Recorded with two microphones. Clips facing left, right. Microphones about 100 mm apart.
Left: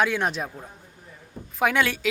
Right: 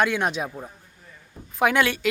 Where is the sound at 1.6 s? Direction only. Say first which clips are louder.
Right 2 dB; centre (ahead or behind).